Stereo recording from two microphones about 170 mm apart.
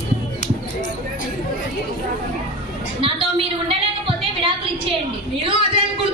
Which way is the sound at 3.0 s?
30° right (ahead or behind).